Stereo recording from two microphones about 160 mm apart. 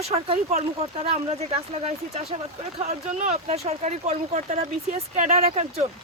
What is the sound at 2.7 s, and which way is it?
Speech, 45° right (ahead or behind).